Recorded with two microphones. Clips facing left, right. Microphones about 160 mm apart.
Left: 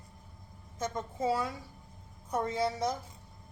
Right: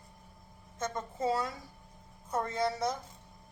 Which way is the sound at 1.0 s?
10° left (ahead or behind).